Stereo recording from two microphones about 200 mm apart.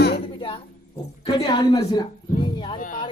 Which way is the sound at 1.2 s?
25° left (ahead or behind).